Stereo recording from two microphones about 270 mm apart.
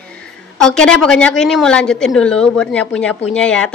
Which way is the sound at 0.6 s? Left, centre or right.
Centre.